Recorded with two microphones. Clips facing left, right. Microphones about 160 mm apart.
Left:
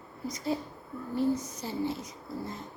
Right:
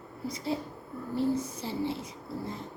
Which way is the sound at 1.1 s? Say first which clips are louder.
Even; 30° right (ahead or behind).